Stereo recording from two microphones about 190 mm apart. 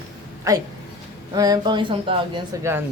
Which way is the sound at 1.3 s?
20° right (ahead or behind).